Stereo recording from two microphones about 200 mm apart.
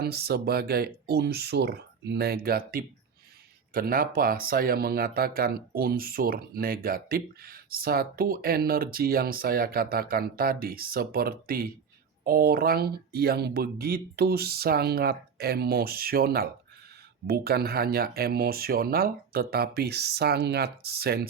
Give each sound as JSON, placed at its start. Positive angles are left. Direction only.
{"t": 0.0, "sound": "speech", "side_deg": -50}